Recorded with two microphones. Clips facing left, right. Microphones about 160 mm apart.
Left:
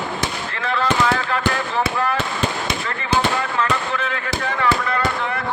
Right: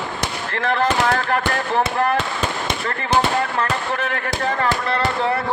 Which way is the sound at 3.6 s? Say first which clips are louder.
Even; 50° right (ahead or behind).